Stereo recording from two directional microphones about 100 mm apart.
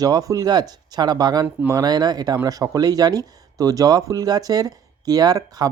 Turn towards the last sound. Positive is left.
turn(degrees=-40)  # may be behind; listen again after turning